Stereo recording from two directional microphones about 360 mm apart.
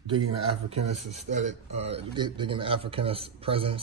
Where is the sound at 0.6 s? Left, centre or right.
Centre.